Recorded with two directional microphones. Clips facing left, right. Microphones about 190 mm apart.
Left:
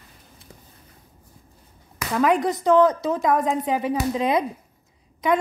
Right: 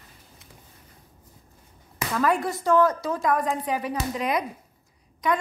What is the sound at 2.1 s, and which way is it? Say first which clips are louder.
A woman's voice: left 4 dB; 20° left (ahead or behind).